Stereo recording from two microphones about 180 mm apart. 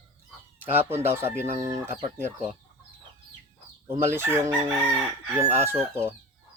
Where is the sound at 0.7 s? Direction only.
10° right (ahead or behind).